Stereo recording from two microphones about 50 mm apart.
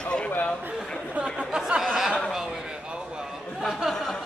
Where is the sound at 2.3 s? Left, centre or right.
Centre.